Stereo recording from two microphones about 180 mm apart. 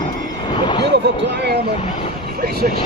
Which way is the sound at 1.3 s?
70° right (ahead or behind).